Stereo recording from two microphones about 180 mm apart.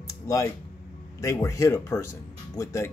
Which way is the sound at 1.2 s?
15° left (ahead or behind).